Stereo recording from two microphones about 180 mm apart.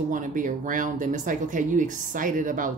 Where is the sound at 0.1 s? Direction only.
45° right (ahead or behind).